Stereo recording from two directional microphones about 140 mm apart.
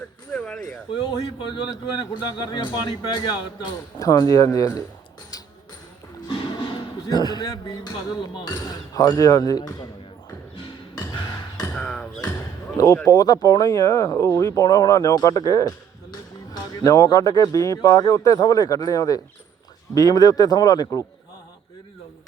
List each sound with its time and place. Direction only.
0.3 s a sound: 5° left (ahead or behind)
1.7 s speech: 30° left (ahead or behind)
5.3 s basketball bounce: 25° left (ahead or behind)
7.1 s speech: 30° left (ahead or behind)
11.7 s basketball bounce: 5° left (ahead or behind)
12.7 s speech: 20° left (ahead or behind)
16.8 s speech: 25° left (ahead or behind)